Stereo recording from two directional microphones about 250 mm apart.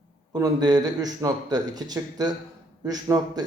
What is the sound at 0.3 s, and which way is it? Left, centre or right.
Speech, centre.